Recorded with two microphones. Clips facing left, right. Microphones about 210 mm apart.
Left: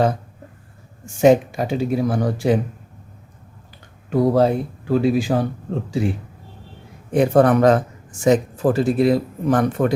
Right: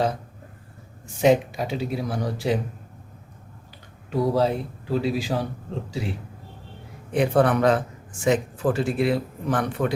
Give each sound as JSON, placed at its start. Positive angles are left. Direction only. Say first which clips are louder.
{"t": 1.0, "sound": "speech", "louder": "left 5 dB", "side_deg": 45}
{"t": 4.1, "sound": "speech", "louder": "left 5 dB", "side_deg": 50}